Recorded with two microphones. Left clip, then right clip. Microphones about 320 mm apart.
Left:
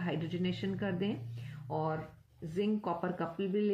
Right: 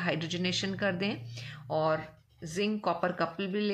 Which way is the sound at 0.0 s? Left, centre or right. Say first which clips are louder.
Right 5 dB; right.